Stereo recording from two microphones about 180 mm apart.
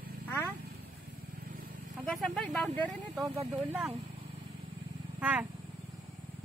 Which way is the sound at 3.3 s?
20° right (ahead or behind).